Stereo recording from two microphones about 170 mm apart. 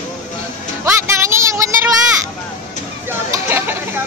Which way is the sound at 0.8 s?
15° right (ahead or behind).